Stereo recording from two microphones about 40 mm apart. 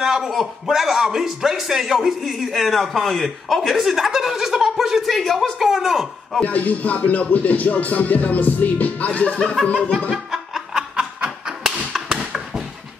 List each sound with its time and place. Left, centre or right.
0.0 s a man's voice: centre
6.4 s music: left
10.3 s snicker: centre
11.9 s a sound: centre